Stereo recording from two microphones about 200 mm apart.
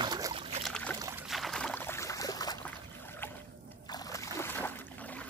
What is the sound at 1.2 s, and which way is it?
Boat, centre (ahead or behind).